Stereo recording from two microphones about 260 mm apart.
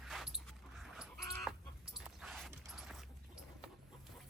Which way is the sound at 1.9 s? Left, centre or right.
Centre.